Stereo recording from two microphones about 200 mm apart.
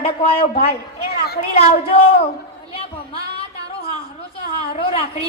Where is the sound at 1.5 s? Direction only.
30° left (ahead or behind).